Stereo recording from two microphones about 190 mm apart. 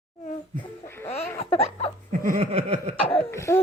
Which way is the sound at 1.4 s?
35° left (ahead or behind).